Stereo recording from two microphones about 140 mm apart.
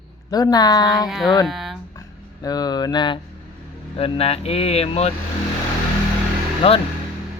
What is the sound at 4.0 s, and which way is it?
Speech, 45° left (ahead or behind).